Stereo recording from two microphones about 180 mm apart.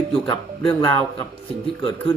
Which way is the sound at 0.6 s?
10° left (ahead or behind).